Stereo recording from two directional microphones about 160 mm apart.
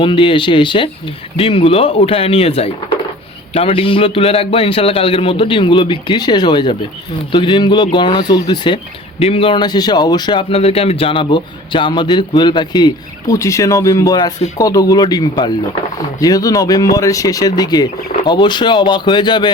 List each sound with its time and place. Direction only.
0.0 s a man's voice: 30° left (ahead or behind)